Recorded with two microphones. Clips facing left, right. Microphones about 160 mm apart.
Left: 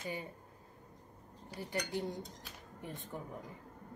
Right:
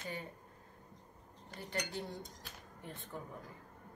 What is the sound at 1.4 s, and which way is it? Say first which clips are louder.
Cutlery: left 2 dB; 10° left (ahead or behind).